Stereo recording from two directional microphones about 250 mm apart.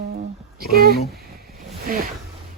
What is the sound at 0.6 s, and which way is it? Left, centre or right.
Speech, right.